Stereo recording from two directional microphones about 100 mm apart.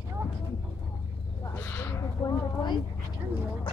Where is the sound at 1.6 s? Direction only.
25° left (ahead or behind).